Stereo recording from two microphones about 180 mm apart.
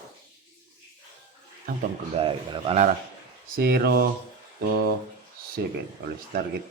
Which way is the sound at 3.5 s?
55° right (ahead or behind).